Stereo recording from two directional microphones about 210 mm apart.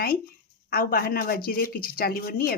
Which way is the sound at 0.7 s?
45° left (ahead or behind).